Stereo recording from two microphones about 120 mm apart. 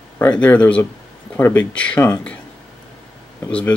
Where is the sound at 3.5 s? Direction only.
10° left (ahead or behind).